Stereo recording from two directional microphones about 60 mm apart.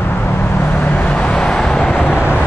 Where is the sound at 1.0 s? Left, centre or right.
Centre.